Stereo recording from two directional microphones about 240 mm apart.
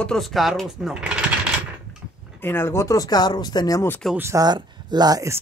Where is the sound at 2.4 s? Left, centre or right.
Centre.